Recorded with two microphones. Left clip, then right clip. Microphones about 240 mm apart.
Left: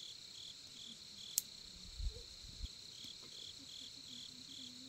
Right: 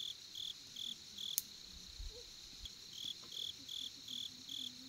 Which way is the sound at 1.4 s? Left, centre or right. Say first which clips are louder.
Left 2 dB; centre.